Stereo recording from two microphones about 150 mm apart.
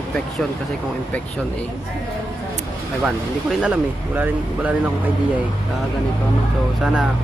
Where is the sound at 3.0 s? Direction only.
10° right (ahead or behind).